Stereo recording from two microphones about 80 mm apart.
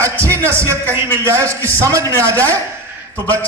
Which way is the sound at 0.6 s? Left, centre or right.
Right.